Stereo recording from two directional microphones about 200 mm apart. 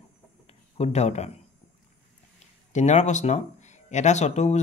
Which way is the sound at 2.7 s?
35° left (ahead or behind).